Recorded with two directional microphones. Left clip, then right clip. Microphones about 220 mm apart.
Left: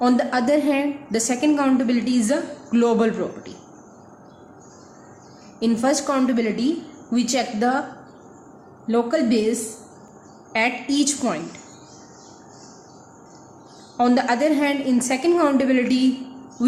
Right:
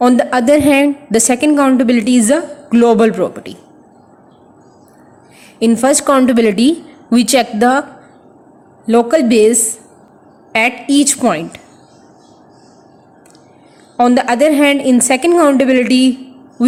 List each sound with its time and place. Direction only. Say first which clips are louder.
0.0 s a woman's voice: right 9 dB; 35° right (ahead or behind)
5.5 s a woman's voice: right 9 dB; 35° right (ahead or behind)
8.9 s a woman's voice: right 10 dB; 35° right (ahead or behind)
13.9 s a woman's voice: right 8 dB; 35° right (ahead or behind)